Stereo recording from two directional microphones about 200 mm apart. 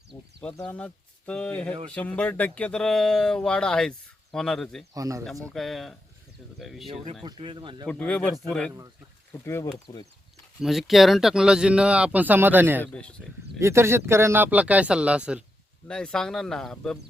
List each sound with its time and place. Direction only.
0.1 s a sound: centre (ahead or behind)
1.3 s speech: 5° left (ahead or behind)
4.9 s speech: 15° right (ahead or behind)
5.5 s speech: centre (ahead or behind)
7.3 s speech: 20° right (ahead or behind)
7.9 s speech: 5° left (ahead or behind)
10.6 s speech: centre (ahead or behind)
12.8 s speech: 5° left (ahead or behind)
13.6 s speech: 15° right (ahead or behind); by 17.0 s centre (ahead or behind)